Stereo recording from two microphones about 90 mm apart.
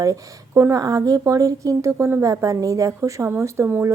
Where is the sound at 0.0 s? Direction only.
35° right (ahead or behind).